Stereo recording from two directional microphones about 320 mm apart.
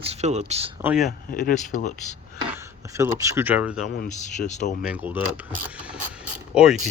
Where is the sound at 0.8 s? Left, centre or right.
Centre.